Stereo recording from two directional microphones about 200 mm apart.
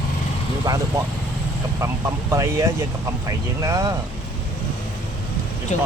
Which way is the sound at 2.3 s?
15° right (ahead or behind).